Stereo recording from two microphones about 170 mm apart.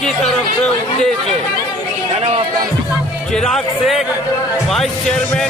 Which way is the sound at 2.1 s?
35° right (ahead or behind).